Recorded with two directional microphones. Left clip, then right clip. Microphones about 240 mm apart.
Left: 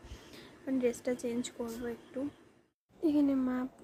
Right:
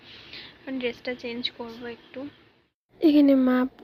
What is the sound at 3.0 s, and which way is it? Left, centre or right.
Speech, right.